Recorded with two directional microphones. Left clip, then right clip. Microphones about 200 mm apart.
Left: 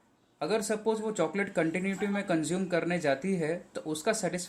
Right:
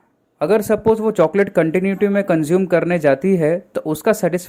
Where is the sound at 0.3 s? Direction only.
45° right (ahead or behind).